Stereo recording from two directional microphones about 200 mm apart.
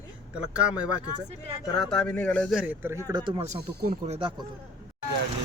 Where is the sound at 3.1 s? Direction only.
20° right (ahead or behind).